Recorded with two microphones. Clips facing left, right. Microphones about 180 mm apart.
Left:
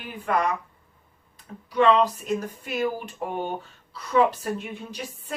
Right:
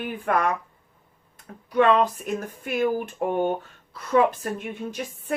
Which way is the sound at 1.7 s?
50° right (ahead or behind).